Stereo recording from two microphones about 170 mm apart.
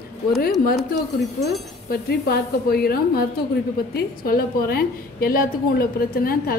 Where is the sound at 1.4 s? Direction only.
70° left (ahead or behind).